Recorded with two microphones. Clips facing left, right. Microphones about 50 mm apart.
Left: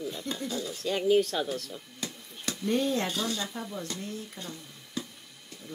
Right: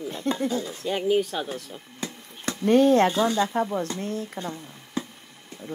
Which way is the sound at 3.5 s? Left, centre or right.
Right.